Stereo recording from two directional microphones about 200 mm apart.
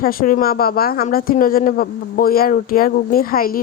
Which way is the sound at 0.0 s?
45° left (ahead or behind).